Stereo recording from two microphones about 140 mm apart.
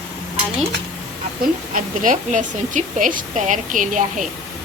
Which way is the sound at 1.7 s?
70° right (ahead or behind).